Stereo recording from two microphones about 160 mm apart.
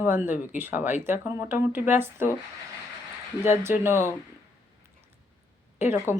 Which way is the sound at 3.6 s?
15° right (ahead or behind).